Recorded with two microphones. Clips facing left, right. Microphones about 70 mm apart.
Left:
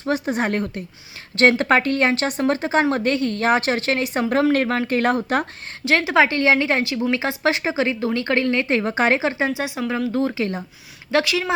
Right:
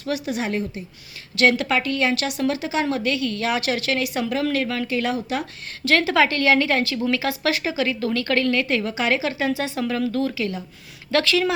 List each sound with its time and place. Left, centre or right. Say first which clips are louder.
0.0 s speech: left 4 dB; left
1.4 s a woman's voice: left 3 dB; left
5.8 s a woman's voice: left 1 dB; left
11.1 s speech: even; centre